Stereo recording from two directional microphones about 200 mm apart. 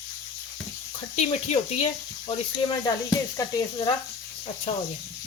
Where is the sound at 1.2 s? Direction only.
35° left (ahead or behind).